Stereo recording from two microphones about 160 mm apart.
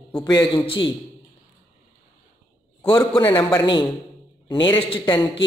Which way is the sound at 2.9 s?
30° left (ahead or behind).